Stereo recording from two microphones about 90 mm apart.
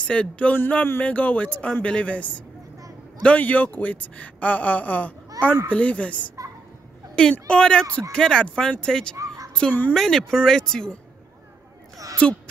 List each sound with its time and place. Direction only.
0.0 s speech: 15° left (ahead or behind)
5.4 s a child's voice: 40° right (ahead or behind)
5.7 s speech: 15° left (ahead or behind)
7.3 s speech: 10° left (ahead or behind)
9.1 s a sound: 40° right (ahead or behind)
9.5 s a woman's voice: 10° left (ahead or behind)
9.9 s speech: 5° left (ahead or behind)